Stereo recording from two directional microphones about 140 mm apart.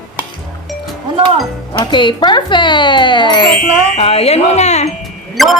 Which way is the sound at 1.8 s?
35° left (ahead or behind).